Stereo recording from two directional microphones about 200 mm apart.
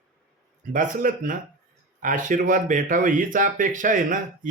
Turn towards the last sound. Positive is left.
turn(degrees=-40)  # may be behind; listen again after turning